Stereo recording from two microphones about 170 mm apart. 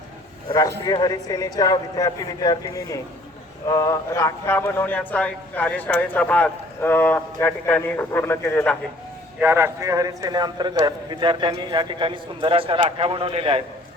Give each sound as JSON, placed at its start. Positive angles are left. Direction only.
{"t": 0.4, "sound": "a man's voice", "side_deg": 20}
{"t": 9.4, "sound": "a man's voice", "side_deg": -15}